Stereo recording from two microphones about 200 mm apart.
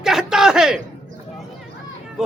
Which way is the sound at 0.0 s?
5° right (ahead or behind).